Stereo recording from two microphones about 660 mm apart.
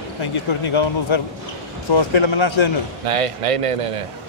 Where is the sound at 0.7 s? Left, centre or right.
Left.